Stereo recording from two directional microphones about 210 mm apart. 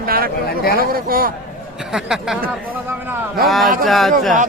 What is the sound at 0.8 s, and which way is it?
Speech, 45° right (ahead or behind).